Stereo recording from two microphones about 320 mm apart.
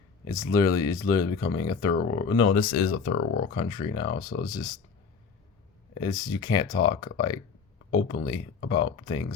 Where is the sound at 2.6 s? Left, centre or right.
Left.